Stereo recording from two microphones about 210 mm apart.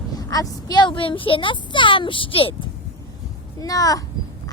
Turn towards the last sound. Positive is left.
turn(degrees=15)  # may be behind; listen again after turning